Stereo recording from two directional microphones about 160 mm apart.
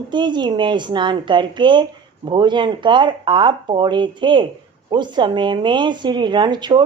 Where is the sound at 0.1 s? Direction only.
30° right (ahead or behind).